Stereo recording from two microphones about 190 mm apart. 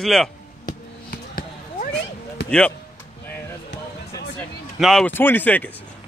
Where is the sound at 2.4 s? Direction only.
5° left (ahead or behind).